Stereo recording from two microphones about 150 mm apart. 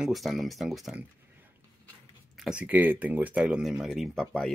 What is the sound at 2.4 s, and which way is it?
Speech, 5° right (ahead or behind).